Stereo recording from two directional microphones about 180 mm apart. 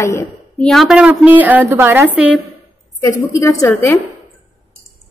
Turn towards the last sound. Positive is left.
turn(degrees=10)  # may be behind; listen again after turning